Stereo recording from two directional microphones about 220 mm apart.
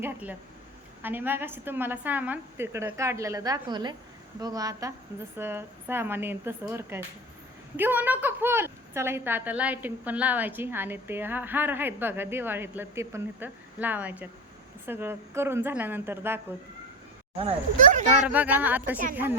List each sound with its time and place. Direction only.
0.0 s a woman's voice: 5° right (ahead or behind)
17.7 s speech: 35° right (ahead or behind)
18.3 s a woman's voice: 5° right (ahead or behind)